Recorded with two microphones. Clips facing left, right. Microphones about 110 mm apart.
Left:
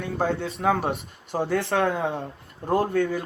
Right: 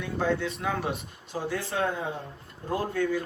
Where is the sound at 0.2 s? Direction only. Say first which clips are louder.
Left 2 dB; 45° left (ahead or behind).